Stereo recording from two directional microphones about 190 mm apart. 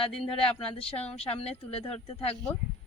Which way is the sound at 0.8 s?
30° left (ahead or behind).